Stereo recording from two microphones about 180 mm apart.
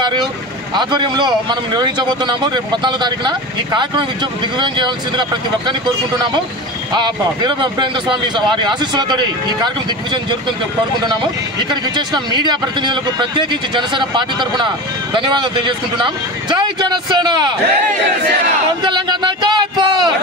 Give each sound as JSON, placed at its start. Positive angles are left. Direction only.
{"t": 0.0, "sound": "vehicle", "side_deg": -25}
{"t": 0.7, "sound": "a man's voice", "side_deg": -25}
{"t": 11.7, "sound": "a man's voice", "side_deg": -25}
{"t": 18.9, "sound": "a sound", "side_deg": -25}